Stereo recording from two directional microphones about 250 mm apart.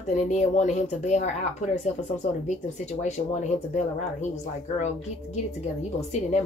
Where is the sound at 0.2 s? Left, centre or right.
Left.